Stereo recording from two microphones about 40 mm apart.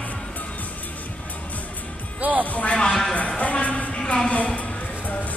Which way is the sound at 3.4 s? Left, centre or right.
Left.